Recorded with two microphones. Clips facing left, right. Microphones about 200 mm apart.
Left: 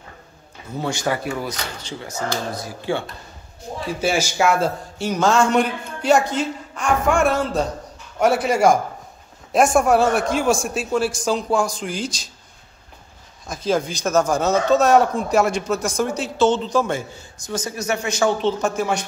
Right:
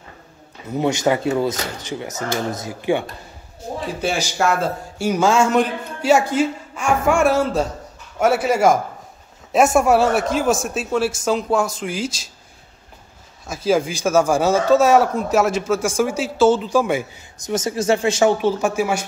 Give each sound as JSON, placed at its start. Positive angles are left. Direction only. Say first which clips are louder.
{"t": 0.7, "sound": "speech", "louder": "right 5 dB", "side_deg": -20}
{"t": 4.4, "sound": "a man's voice", "louder": "right 1 dB", "side_deg": 0}
{"t": 13.5, "sound": "speech", "louder": "right 3 dB", "side_deg": -5}
{"t": 17.5, "sound": "speech", "louder": "right 6 dB", "side_deg": -25}
{"t": 18.4, "sound": "speech", "louder": "right 2 dB", "side_deg": -10}